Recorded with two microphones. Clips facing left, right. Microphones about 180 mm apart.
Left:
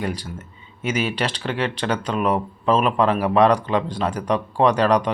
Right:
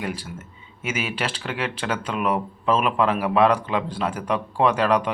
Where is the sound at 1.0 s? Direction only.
5° right (ahead or behind).